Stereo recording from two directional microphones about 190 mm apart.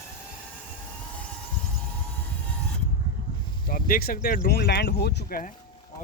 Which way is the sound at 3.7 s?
50° left (ahead or behind).